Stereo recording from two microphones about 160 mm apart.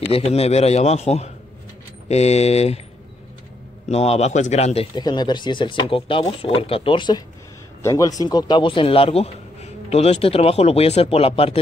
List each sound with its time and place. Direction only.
0.1 s a man's voice: 40° left (ahead or behind)
3.9 s a man's voice: 40° left (ahead or behind)
4.9 s speech: 25° left (ahead or behind)